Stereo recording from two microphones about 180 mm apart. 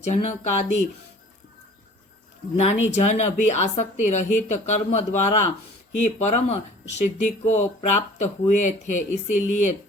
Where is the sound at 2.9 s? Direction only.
40° left (ahead or behind).